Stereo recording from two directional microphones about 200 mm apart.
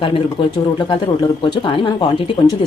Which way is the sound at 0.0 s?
25° left (ahead or behind).